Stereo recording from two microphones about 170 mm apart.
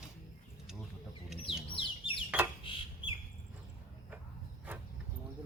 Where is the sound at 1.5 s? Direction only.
30° left (ahead or behind).